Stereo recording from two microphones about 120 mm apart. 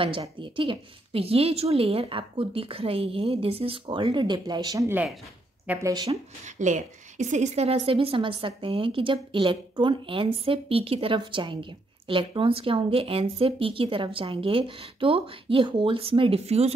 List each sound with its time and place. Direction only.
0.4 s a woman's voice: 45° right (ahead or behind)
4.8 s speech: 15° right (ahead or behind)
5.8 s speech: 30° right (ahead or behind)
6.4 s a woman's voice: 85° right; by 16.7 s 60° right (ahead or behind)